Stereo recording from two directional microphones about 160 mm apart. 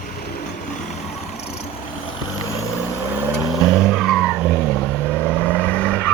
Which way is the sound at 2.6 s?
20° left (ahead or behind).